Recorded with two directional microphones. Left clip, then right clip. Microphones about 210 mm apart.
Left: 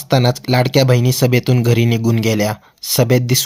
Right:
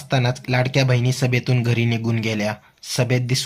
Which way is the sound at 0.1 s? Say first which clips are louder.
Left 7 dB; 40° left (ahead or behind).